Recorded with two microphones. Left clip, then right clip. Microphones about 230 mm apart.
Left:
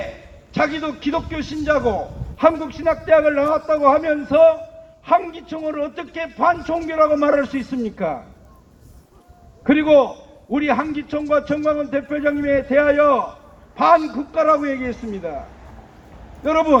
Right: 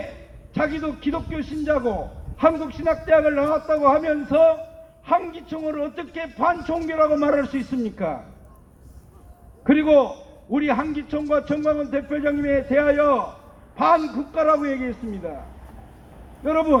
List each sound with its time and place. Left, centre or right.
0.5 s a man's voice: left
9.6 s a man's voice: left
16.4 s a man's voice: left